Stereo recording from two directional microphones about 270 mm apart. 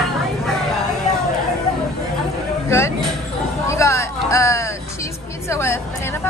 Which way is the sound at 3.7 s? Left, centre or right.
Centre.